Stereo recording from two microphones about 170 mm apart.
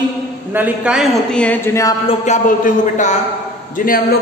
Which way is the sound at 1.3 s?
10° left (ahead or behind).